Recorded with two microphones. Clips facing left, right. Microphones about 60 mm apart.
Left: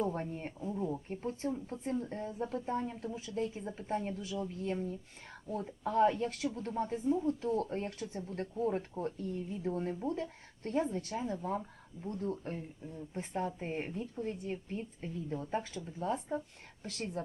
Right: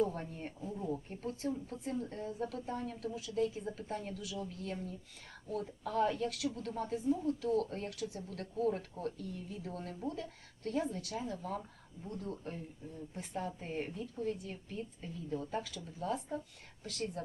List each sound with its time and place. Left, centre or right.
0.0 s speech: left
1.1 s speech: left
3.2 s a woman's voice: left